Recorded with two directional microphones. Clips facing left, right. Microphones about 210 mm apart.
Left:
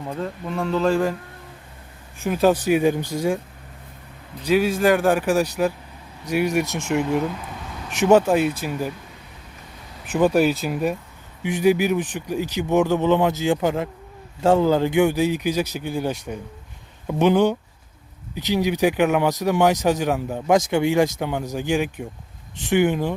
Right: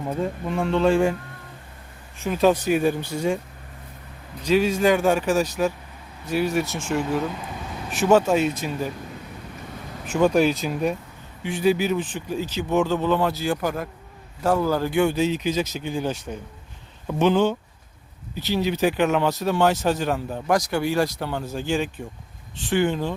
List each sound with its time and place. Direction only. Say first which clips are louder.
0.0 s speech: right 2 dB; 5° right (ahead or behind)
2.2 s speech: left 1 dB; 10° left (ahead or behind)
4.4 s speech: left 1 dB; 5° left (ahead or behind)
8.3 s speech: left 1 dB; 10° left (ahead or behind)
10.2 s speech: left 1 dB; 5° left (ahead or behind)